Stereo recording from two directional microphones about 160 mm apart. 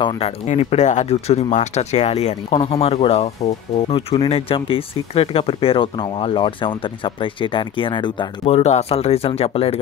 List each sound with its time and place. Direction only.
0.5 s speech: 45° left (ahead or behind)